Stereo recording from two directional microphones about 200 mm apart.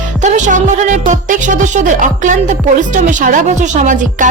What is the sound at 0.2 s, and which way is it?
Speech, 35° right (ahead or behind).